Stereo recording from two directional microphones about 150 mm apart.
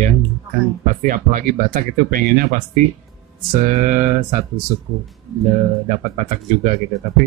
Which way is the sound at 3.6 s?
60° right (ahead or behind).